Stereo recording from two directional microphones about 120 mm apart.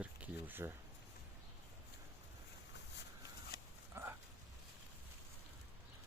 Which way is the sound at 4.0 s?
20° right (ahead or behind).